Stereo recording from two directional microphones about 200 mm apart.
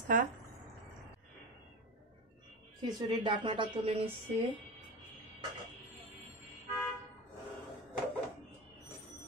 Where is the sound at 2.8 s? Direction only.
20° right (ahead or behind).